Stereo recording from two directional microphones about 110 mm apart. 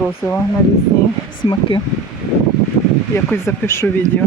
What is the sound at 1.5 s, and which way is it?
Speech, 50° left (ahead or behind).